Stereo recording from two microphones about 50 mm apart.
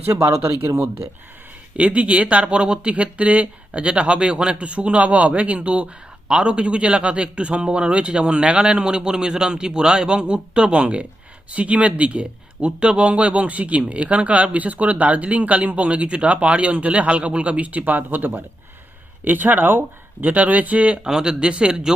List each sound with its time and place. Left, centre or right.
0.1 s speech: right
1.7 s speech: right